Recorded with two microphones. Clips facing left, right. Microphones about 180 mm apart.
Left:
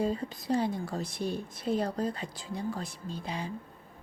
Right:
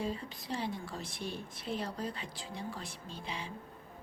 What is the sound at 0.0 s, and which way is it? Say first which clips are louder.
Speech: left 7 dB; 40° left (ahead or behind).